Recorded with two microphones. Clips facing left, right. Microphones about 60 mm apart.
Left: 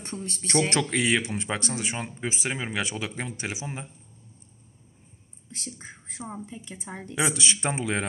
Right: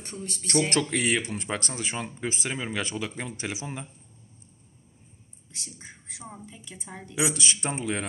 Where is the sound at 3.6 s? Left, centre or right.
Left.